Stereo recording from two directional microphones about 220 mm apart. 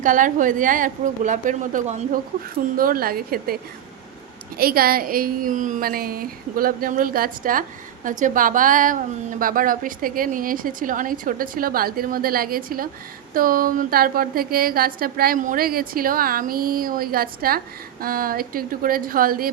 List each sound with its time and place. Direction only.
0.0 s a woman's voice: 35° right (ahead or behind)